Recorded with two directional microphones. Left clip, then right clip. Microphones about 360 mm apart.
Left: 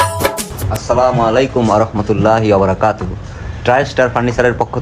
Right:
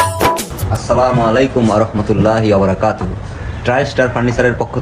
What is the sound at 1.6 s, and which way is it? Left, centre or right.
Speech, centre.